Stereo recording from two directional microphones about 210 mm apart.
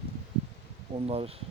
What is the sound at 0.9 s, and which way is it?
Speech, 25° right (ahead or behind).